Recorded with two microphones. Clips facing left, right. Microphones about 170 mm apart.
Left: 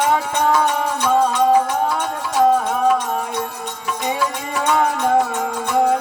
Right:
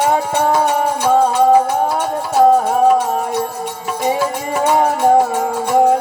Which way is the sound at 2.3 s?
45° right (ahead or behind).